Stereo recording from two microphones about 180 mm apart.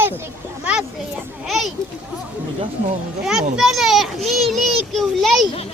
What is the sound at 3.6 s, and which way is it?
A child's voice, centre (ahead or behind).